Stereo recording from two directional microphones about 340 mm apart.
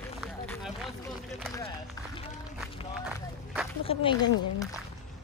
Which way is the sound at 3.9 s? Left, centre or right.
Centre.